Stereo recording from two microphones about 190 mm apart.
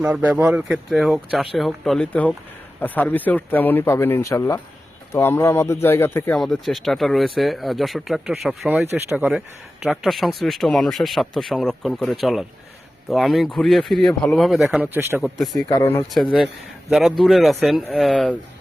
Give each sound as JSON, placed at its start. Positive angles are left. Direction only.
{"t": 0.0, "sound": "speech", "side_deg": -5}
{"t": 8.8, "sound": "speech", "side_deg": -15}
{"t": 15.2, "sound": "speech", "side_deg": 0}
{"t": 15.7, "sound": "speech", "side_deg": 15}
{"t": 16.1, "sound": "speech", "side_deg": 0}